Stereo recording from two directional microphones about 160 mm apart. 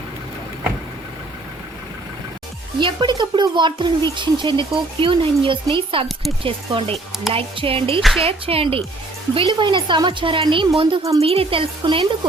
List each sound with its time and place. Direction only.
2.7 s speech: 30° right (ahead or behind)